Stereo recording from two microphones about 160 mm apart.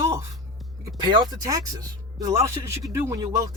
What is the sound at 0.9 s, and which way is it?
Speech, 25° right (ahead or behind).